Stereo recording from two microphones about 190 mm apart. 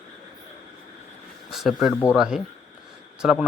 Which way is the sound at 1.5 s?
Centre (ahead or behind).